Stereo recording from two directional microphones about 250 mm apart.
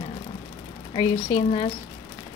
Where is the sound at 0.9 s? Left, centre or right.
Left.